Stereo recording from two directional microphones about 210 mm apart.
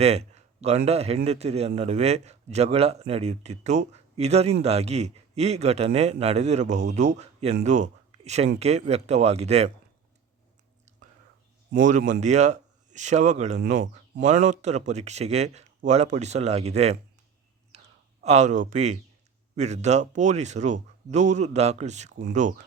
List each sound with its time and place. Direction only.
0.0 s a sound: 30° right (ahead or behind)
0.9 s a man's voice: 30° right (ahead or behind)
11.8 s speech: 35° right (ahead or behind)
18.2 s speech: 30° right (ahead or behind)